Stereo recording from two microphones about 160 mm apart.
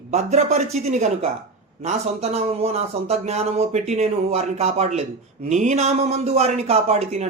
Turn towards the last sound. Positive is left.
turn(degrees=-40)  # may be behind; listen again after turning